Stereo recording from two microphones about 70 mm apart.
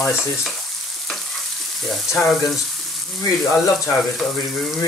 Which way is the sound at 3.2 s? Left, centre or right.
Left.